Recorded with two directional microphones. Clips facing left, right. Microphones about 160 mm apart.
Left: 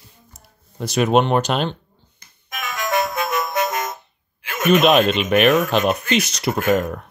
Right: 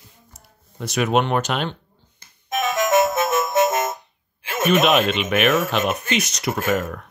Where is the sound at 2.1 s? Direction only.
25° right (ahead or behind).